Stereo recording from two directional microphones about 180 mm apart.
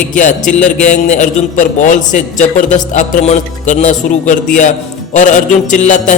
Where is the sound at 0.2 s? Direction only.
45° left (ahead or behind).